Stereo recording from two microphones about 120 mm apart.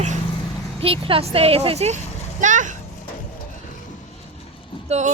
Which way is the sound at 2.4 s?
90° right.